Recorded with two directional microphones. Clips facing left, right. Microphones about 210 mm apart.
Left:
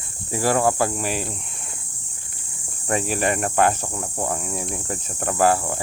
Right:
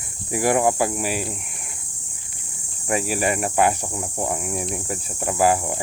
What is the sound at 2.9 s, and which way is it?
Speech, 5° right (ahead or behind).